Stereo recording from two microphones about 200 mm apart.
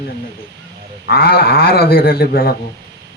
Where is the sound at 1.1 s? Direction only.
50° left (ahead or behind).